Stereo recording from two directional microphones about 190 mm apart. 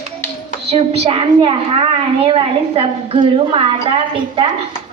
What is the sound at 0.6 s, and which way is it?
A woman's voice, 35° right (ahead or behind).